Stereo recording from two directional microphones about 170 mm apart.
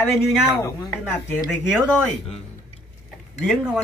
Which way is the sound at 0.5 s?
15° left (ahead or behind).